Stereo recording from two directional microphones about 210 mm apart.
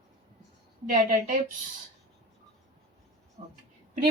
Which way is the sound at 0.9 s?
40° right (ahead or behind).